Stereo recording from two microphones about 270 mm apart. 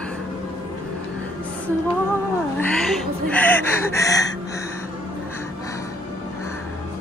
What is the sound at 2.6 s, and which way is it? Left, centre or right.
Gasp, centre.